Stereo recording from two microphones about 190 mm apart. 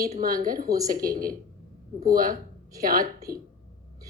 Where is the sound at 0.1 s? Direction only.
45° right (ahead or behind).